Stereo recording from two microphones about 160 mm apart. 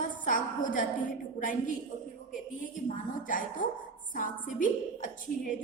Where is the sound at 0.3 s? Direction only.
55° left (ahead or behind).